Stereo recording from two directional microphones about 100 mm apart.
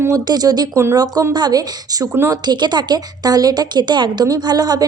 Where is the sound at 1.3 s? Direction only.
45° right (ahead or behind).